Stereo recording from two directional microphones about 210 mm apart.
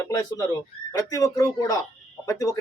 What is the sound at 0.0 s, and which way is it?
A man's voice, 15° left (ahead or behind).